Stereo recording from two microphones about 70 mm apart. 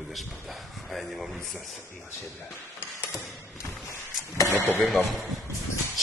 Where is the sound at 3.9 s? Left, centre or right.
Left.